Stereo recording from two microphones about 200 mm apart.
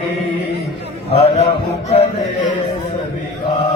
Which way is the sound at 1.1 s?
30° left (ahead or behind).